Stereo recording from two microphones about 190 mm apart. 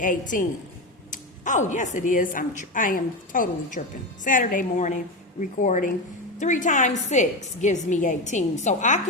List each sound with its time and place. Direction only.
0.0 s a woman's voice: 45° left (ahead or behind)